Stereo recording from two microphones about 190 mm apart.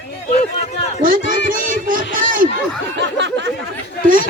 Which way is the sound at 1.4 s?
45° right (ahead or behind).